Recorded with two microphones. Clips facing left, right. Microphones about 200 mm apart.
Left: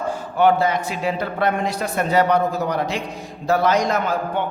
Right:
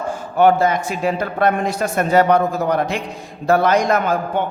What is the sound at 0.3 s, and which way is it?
A man's voice, 45° right (ahead or behind).